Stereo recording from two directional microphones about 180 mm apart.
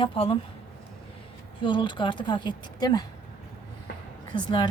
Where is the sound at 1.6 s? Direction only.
30° left (ahead or behind).